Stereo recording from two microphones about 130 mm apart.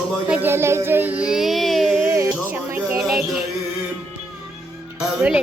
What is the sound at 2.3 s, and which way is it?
Music, 10° right (ahead or behind).